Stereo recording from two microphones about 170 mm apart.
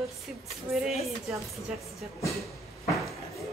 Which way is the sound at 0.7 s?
Centre (ahead or behind).